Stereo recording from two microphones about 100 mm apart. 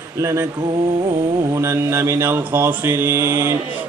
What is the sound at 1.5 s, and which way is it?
Mantra, 25° right (ahead or behind).